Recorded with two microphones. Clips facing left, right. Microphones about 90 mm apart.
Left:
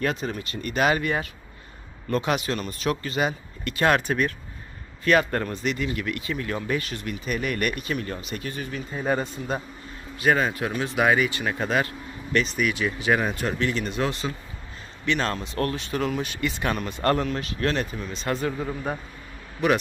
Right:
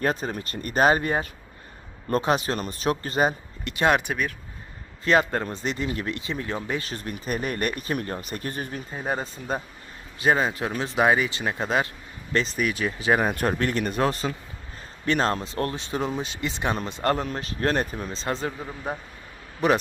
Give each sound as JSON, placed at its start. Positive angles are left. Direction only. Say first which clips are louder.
{"t": 0.0, "sound": "speech", "louder": "right 1 dB", "side_deg": -35}
{"t": 3.6, "sound": "speech", "louder": "even", "side_deg": -20}
{"t": 4.1, "sound": "speech", "louder": "left 3 dB", "side_deg": -5}
{"t": 5.0, "sound": "speech", "louder": "even", "side_deg": -20}
{"t": 6.8, "sound": "speech", "louder": "left 1 dB", "side_deg": -35}
{"t": 10.2, "sound": "speech", "louder": "even", "side_deg": -25}
{"t": 13.3, "sound": "speech", "louder": "right 2 dB", "side_deg": -45}
{"t": 17.2, "sound": "speech", "louder": "even", "side_deg": -35}
{"t": 19.6, "sound": "speech", "louder": "even", "side_deg": -35}